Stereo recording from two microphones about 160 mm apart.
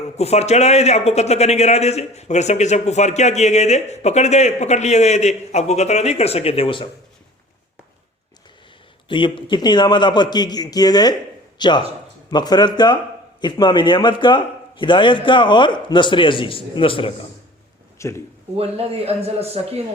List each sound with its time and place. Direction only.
0.2 s a man's voice: 40° left (ahead or behind)
9.0 s a man's voice: 30° left (ahead or behind)
18.0 s speech: 20° left (ahead or behind)
18.5 s speech: 40° right (ahead or behind)